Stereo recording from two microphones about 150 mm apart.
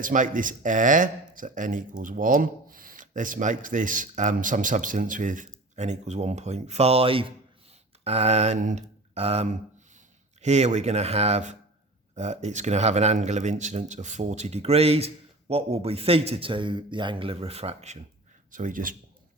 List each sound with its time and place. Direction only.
0.0 s speech: 60° right (ahead or behind)
5.7 s a man's voice: 50° right (ahead or behind)
18.5 s speech: 65° right (ahead or behind)